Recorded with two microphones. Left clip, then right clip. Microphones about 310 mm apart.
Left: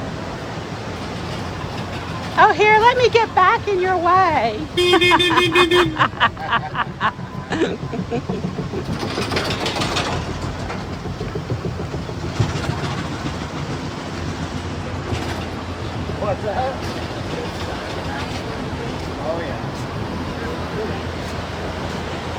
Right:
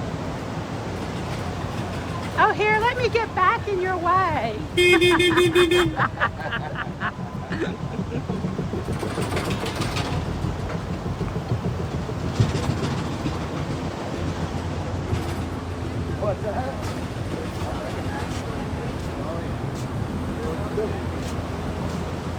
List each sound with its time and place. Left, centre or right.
2.4 s speech: centre